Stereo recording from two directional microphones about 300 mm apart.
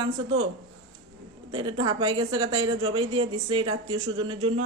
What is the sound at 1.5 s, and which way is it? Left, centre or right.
Speech, centre.